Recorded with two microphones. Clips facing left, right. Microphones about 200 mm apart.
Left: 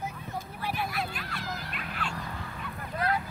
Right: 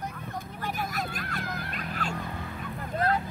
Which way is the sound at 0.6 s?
45° right (ahead or behind).